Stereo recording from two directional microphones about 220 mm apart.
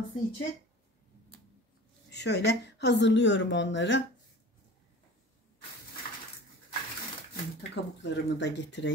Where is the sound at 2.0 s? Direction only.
50° left (ahead or behind).